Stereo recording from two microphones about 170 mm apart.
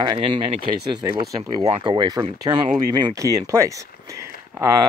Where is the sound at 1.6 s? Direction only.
25° right (ahead or behind).